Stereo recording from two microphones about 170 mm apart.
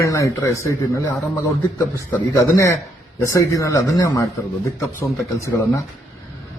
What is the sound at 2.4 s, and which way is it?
A man's voice, 15° left (ahead or behind).